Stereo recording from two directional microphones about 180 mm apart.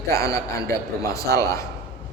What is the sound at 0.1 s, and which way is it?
A man's voice, 15° left (ahead or behind).